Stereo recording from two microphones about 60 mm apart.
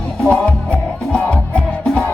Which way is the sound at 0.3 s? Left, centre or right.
Centre.